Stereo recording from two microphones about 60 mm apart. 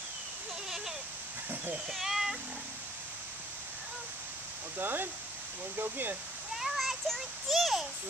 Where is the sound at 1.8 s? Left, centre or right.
Centre.